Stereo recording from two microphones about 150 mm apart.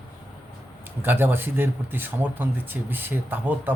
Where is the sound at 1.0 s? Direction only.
15° right (ahead or behind).